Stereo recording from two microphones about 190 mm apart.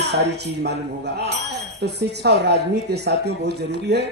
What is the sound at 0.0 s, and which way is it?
Speech, 60° right (ahead or behind).